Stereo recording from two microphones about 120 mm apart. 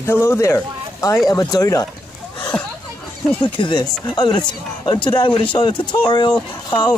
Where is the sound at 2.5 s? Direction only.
5° left (ahead or behind).